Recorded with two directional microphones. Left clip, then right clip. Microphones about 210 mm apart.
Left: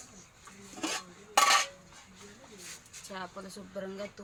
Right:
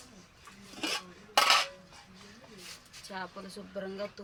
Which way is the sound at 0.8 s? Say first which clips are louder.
Right 1 dB; 15° right (ahead or behind).